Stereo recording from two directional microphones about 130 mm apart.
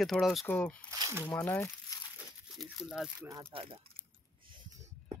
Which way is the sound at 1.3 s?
15° left (ahead or behind).